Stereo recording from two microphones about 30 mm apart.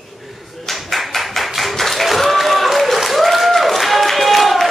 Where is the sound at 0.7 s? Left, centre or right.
Centre.